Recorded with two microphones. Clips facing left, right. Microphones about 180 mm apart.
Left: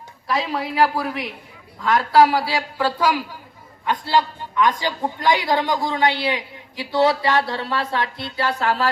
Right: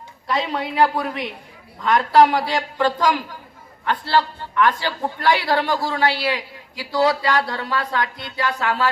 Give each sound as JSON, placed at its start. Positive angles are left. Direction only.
{"t": 0.3, "sound": "a man's voice", "side_deg": 0}